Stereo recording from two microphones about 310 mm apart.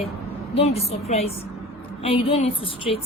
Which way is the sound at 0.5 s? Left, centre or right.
Centre.